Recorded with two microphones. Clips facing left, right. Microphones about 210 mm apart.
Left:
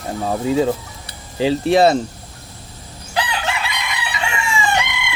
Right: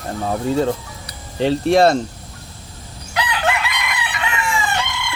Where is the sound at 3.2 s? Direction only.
30° left (ahead or behind).